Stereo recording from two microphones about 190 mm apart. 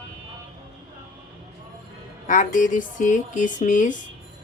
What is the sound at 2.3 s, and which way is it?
Speech, 40° left (ahead or behind).